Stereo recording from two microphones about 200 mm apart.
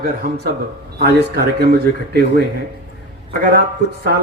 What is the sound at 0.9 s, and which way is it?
A man's voice, 50° right (ahead or behind).